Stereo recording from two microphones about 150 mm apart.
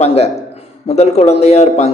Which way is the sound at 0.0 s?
45° left (ahead or behind).